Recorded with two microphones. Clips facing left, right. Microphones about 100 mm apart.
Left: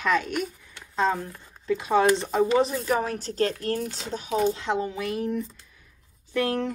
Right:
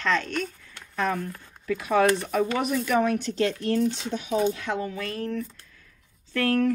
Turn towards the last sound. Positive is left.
turn(degrees=20)  # may be behind; listen again after turning